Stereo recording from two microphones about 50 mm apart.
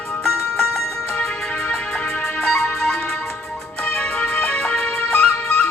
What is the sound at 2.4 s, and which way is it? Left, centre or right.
Music, centre.